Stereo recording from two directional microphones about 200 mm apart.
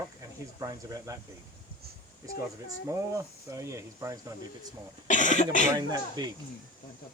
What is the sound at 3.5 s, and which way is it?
Speech, 15° right (ahead or behind).